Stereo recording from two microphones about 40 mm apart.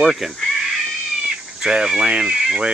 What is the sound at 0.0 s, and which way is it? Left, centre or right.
Speech, centre.